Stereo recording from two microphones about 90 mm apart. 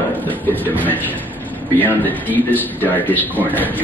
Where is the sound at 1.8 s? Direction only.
20° left (ahead or behind).